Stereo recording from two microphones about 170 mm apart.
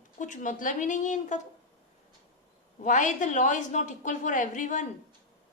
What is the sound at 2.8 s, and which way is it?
A woman's voice, 50° left (ahead or behind).